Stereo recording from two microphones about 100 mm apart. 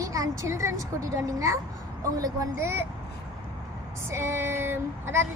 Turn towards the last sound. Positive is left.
turn(degrees=-25)  # may be behind; listen again after turning